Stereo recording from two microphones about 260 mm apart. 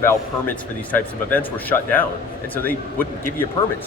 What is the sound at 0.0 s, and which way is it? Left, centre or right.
Speech, centre.